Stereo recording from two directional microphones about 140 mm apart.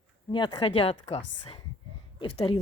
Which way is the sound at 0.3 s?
35° left (ahead or behind).